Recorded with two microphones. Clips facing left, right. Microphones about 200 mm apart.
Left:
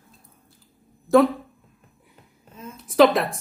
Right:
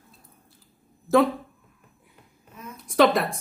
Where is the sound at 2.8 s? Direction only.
Centre (ahead or behind).